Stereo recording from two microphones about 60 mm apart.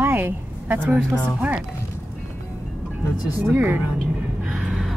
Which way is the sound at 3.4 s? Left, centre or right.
Right.